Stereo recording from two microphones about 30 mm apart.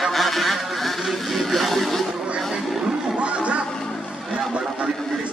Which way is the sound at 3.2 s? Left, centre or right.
Right.